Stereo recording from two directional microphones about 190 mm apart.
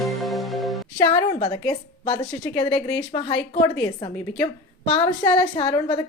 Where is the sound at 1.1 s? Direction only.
25° left (ahead or behind).